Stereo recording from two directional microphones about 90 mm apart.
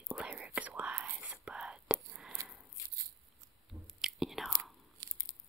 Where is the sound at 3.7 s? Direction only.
5° right (ahead or behind).